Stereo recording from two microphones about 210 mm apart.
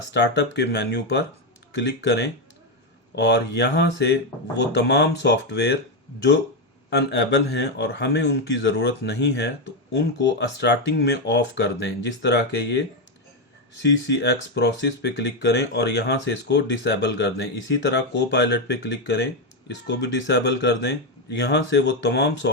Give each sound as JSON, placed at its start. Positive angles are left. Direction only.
{"t": 0.1, "sound": "a man's voice", "side_deg": 55}
{"t": 6.9, "sound": "a man's voice", "side_deg": 55}
{"t": 13.8, "sound": "speech", "side_deg": 55}